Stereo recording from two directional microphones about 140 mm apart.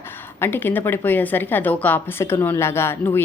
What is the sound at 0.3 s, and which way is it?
A woman's voice, 15° left (ahead or behind).